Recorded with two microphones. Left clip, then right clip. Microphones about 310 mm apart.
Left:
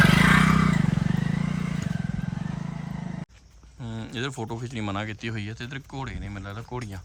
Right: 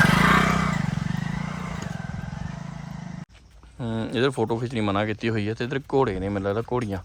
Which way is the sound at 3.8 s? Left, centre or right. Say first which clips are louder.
Right 9 dB; centre.